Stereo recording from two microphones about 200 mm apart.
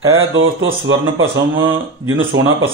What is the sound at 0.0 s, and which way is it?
Speech, 80° right.